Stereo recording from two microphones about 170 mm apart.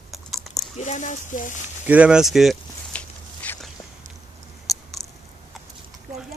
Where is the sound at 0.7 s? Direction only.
45° left (ahead or behind).